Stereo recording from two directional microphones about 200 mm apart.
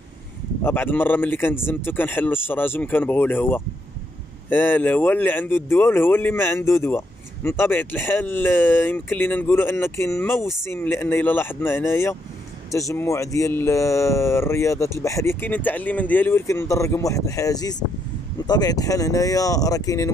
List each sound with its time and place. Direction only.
0.7 s speech: 10° left (ahead or behind)